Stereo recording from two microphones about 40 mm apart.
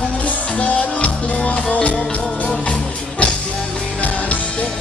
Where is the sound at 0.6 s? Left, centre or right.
Left.